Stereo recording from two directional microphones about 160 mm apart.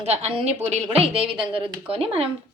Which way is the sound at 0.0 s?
40° right (ahead or behind).